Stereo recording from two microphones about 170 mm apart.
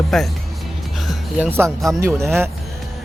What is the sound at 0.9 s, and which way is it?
Music, centre (ahead or behind).